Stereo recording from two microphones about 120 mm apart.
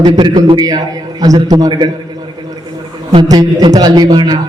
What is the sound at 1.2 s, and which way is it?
Speech, 30° right (ahead or behind).